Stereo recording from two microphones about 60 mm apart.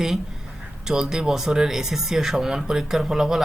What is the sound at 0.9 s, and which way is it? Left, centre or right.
Speech, centre.